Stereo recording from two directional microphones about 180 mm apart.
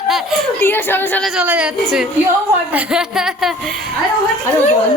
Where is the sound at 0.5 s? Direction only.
10° left (ahead or behind).